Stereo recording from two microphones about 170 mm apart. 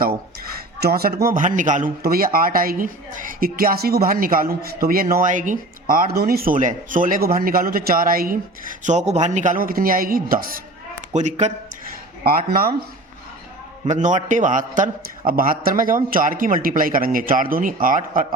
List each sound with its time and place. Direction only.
0.8 s a man's voice: 65° right (ahead or behind)
8.8 s a man's voice: 45° right (ahead or behind)
11.1 s a man's voice: 45° right (ahead or behind)
12.2 s a man's voice: 60° right (ahead or behind)
13.8 s a man's voice: 45° right (ahead or behind)